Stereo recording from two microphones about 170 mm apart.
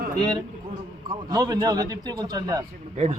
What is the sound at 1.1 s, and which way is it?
A man's voice, 25° right (ahead or behind).